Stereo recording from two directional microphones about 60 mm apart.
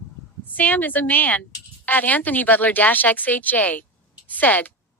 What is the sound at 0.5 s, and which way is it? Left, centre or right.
A woman's voice, left.